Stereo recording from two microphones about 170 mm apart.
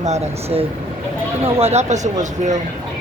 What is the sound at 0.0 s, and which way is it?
Speech, 40° right (ahead or behind).